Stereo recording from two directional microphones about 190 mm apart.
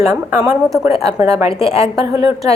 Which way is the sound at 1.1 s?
20° right (ahead or behind).